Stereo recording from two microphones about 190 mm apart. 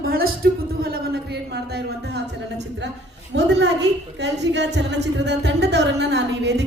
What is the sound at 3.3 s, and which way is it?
A woman's voice, 65° right (ahead or behind).